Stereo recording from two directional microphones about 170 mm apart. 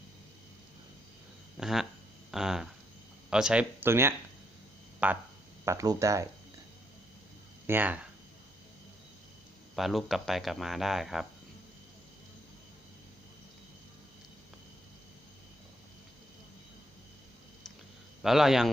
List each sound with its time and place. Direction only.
1.5 s a sound: 5° right (ahead or behind)
2.3 s speech: 5° right (ahead or behind)
5.6 s speech: 20° right (ahead or behind)
7.7 s speech: 10° right (ahead or behind)
9.7 s speech: centre (ahead or behind)
18.2 s speech: centre (ahead or behind)